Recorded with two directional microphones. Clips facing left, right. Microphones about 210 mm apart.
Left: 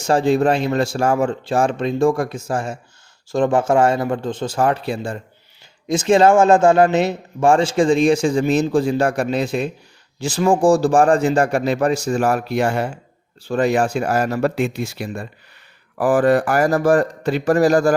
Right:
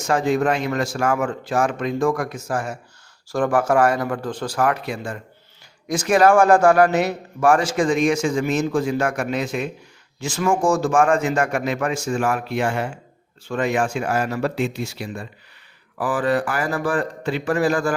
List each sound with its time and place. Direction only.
0.0 s a man's voice: 30° left (ahead or behind)